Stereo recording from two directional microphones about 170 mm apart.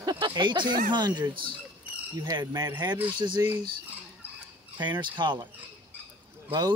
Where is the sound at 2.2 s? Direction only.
20° right (ahead or behind).